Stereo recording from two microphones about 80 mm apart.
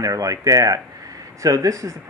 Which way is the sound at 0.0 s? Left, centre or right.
Right.